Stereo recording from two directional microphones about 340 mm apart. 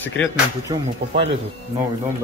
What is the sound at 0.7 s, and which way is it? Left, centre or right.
Speech, centre.